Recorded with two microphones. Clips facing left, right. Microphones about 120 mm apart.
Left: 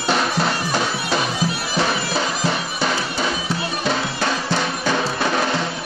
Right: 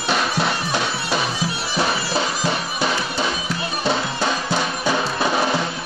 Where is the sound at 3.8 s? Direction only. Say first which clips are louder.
Right 2 dB; 10° right (ahead or behind).